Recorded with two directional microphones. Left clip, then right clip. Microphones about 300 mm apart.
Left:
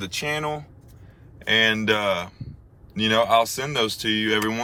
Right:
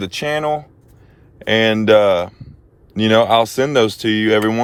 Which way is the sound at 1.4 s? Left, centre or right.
Right.